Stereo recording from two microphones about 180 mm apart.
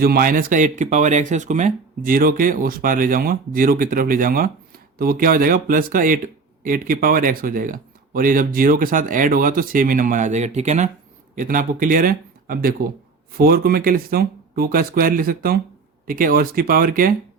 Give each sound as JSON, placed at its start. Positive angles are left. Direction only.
{"t": 0.0, "sound": "speech", "side_deg": -55}